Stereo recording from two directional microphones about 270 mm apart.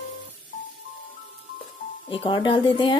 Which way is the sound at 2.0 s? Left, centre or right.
Centre.